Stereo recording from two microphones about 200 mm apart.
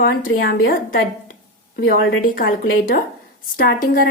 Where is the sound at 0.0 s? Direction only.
45° left (ahead or behind).